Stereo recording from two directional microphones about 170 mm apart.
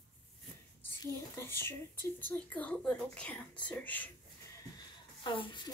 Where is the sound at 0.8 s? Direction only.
15° left (ahead or behind).